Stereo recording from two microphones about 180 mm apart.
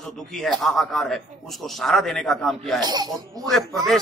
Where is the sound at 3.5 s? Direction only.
Centre (ahead or behind).